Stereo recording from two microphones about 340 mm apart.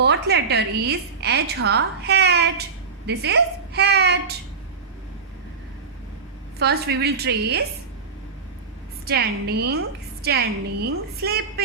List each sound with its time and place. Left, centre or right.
0.0 s a woman's voice: right
6.6 s a woman's voice: right
9.0 s a woman's voice: right
10.8 s a woman's voice: right